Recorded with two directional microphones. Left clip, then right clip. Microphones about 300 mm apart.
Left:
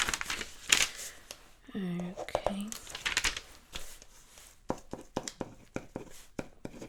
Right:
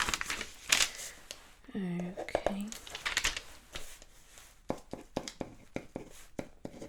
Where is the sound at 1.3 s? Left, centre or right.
Centre.